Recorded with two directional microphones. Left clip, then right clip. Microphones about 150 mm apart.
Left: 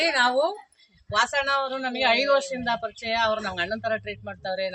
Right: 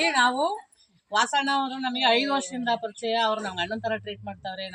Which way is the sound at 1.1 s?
25° left (ahead or behind).